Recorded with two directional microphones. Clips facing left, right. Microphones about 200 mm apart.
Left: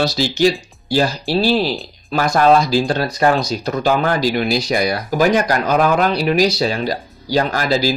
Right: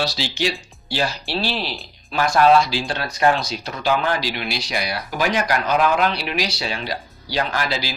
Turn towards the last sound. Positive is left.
turn(degrees=40)  # may be behind; listen again after turning